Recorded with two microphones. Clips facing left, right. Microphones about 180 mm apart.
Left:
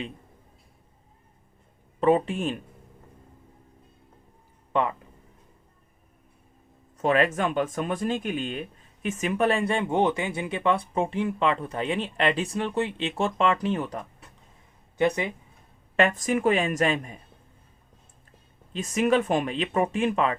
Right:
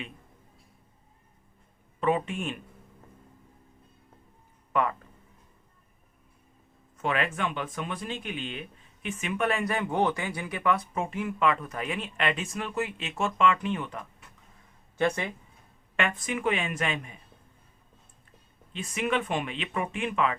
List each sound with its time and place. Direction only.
2.0 s speech: 35° left (ahead or behind)
4.7 s speech: 25° left (ahead or behind)
6.9 s speech: 40° left (ahead or behind)
14.9 s speech: 15° left (ahead or behind)
16.0 s speech: 40° left (ahead or behind)
18.7 s speech: 40° left (ahead or behind)